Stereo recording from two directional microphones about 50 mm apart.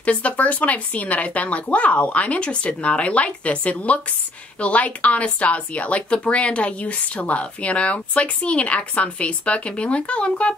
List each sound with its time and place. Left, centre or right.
0.0 s speech: left